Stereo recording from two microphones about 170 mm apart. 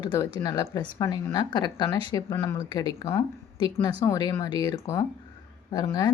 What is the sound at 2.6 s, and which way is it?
Speech, 25° left (ahead or behind).